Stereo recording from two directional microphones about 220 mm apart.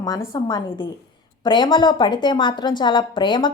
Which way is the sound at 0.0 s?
15° left (ahead or behind).